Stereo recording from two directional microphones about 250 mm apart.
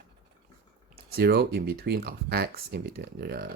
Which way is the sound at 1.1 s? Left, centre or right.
Right.